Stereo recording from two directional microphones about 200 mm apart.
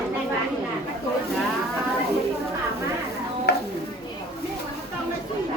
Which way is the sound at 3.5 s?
55° left (ahead or behind).